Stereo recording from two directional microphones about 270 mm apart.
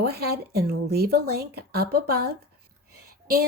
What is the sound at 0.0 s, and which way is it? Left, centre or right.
Speech, right.